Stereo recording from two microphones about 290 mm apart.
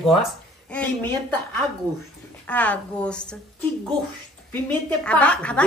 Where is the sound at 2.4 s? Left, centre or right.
Centre.